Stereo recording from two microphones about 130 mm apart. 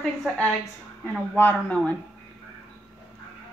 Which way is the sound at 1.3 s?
15° left (ahead or behind).